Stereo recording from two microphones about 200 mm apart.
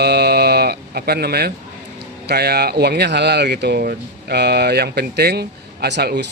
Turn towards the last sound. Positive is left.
turn(degrees=-55)  # may be behind; listen again after turning